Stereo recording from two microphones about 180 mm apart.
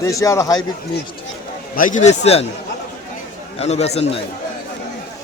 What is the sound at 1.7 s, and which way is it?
Speech, 45° left (ahead or behind).